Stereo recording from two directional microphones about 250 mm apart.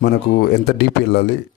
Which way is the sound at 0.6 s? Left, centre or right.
Left.